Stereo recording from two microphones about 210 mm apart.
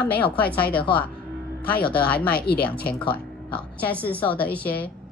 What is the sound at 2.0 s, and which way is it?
Speech, 10° left (ahead or behind).